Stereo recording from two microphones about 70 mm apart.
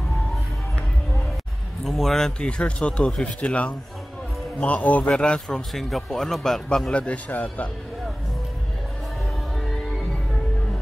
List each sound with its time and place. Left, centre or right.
1.9 s speech: centre
5.7 s speech: centre
6.9 s speech: centre